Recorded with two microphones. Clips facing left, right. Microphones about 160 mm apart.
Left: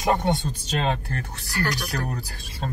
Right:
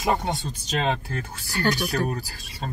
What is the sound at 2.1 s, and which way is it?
Speech, 5° right (ahead or behind).